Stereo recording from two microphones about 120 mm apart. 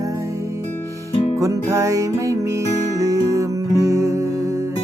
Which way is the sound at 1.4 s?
25° right (ahead or behind).